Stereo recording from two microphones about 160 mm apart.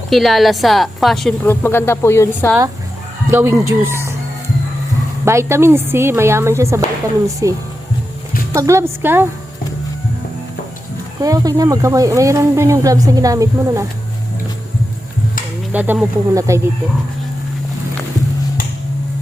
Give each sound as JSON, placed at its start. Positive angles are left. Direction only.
{"t": 0.1, "sound": "a woman's voice", "side_deg": 0}
{"t": 1.5, "sound": "speech", "side_deg": 15}
{"t": 3.2, "sound": "speech", "side_deg": -15}
{"t": 5.2, "sound": "speech", "side_deg": -15}
{"t": 8.5, "sound": "speech", "side_deg": -20}
{"t": 11.2, "sound": "speech", "side_deg": -20}
{"t": 15.7, "sound": "speech", "side_deg": -10}
{"t": 16.3, "sound": "speech", "side_deg": -20}